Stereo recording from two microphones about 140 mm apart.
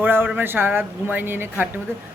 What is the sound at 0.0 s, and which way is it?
Speech, 15° right (ahead or behind).